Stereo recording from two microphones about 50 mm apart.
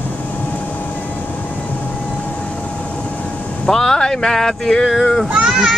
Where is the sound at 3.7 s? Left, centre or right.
Centre.